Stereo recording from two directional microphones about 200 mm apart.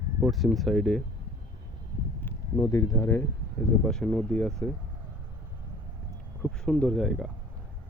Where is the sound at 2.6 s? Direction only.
15° left (ahead or behind).